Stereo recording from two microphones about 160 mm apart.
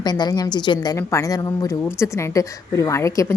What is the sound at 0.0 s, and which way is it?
A woman's voice, 25° left (ahead or behind).